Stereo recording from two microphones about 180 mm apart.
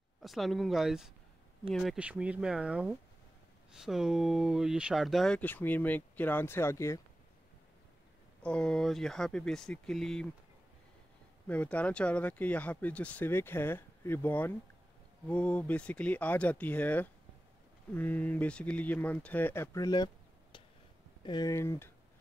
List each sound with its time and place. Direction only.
0.2 s speech: centre (ahead or behind); by 7.0 s 15° left (ahead or behind)
8.4 s speech: 5° left (ahead or behind)
11.4 s speech: 10° left (ahead or behind)
21.2 s speech: 25° left (ahead or behind)